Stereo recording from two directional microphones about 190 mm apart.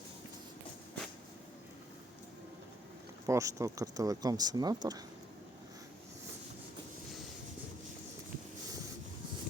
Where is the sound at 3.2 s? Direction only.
15° right (ahead or behind).